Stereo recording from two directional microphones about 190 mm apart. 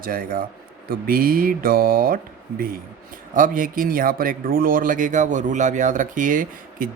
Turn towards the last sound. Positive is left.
turn(degrees=-45)  # may be behind; listen again after turning